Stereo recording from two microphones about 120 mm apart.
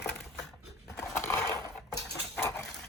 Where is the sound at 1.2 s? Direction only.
20° left (ahead or behind).